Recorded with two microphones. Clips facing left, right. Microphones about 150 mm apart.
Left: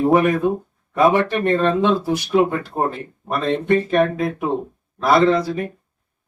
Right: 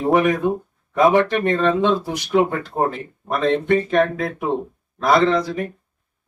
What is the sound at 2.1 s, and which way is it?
Speech, 20° right (ahead or behind).